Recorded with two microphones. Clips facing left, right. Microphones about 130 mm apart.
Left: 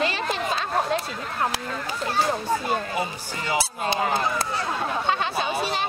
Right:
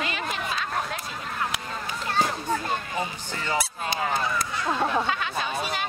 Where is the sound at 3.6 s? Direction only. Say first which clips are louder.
Left 4 dB; 30° left (ahead or behind).